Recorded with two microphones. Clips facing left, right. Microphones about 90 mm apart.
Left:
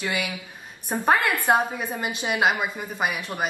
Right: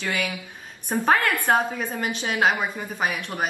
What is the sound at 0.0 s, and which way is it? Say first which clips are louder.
A woman's voice: right 1 dB; 15° left (ahead or behind).